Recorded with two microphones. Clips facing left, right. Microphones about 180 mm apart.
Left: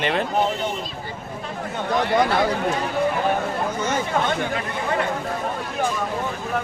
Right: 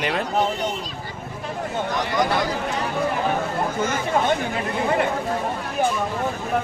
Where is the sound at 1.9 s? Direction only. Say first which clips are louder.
Left 4 dB; 60° left (ahead or behind).